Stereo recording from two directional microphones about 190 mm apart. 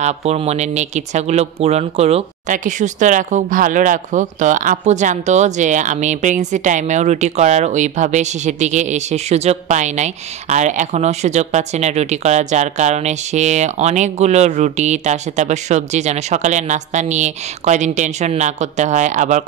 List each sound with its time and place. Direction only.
0.0 s speech: 35° right (ahead or behind)